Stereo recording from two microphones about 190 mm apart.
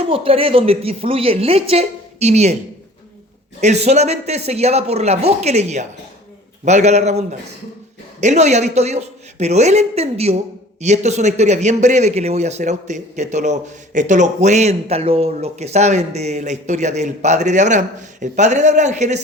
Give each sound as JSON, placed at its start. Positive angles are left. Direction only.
{"t": 0.0, "sound": "speech", "side_deg": -30}
{"t": 3.6, "sound": "speech", "side_deg": -35}